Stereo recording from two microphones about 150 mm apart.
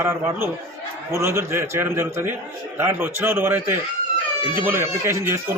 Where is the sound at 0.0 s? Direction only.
15° right (ahead or behind).